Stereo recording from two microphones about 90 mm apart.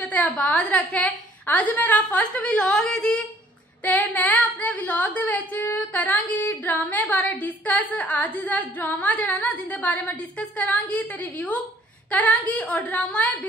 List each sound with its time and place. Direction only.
0.4 s a woman's voice: 15° left (ahead or behind)
3.8 s a woman's voice: 20° left (ahead or behind)